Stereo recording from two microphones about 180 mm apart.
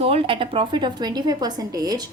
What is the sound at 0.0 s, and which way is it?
A woman's voice, 35° right (ahead or behind).